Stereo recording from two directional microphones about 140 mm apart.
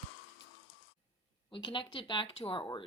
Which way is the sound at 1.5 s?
35° left (ahead or behind).